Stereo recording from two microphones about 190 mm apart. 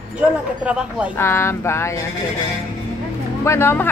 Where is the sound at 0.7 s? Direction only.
5° right (ahead or behind).